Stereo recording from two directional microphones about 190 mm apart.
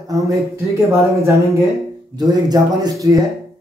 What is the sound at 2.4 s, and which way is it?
Speech, 20° right (ahead or behind).